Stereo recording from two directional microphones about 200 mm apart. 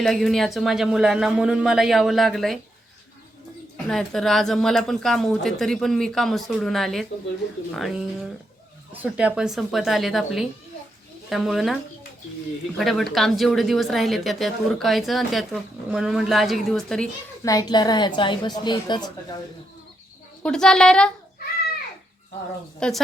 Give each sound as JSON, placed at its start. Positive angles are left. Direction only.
{"t": 0.0, "sound": "speech", "side_deg": 0}
{"t": 3.8, "sound": "speech", "side_deg": 0}
{"t": 12.8, "sound": "speech", "side_deg": 0}
{"t": 17.4, "sound": "a woman's voice", "side_deg": 15}
{"t": 20.4, "sound": "speech", "side_deg": 5}
{"t": 22.8, "sound": "speech", "side_deg": 5}